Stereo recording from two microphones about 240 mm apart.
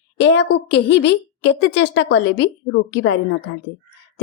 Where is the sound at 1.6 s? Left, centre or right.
Left.